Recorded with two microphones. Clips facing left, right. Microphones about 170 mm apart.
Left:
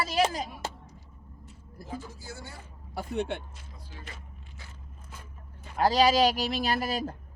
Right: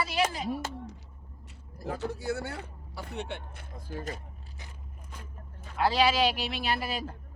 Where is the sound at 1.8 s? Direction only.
70° right (ahead or behind).